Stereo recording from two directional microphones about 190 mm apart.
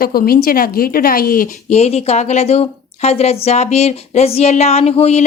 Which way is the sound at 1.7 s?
35° left (ahead or behind).